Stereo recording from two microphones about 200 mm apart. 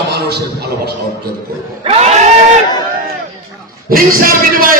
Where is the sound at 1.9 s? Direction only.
35° right (ahead or behind).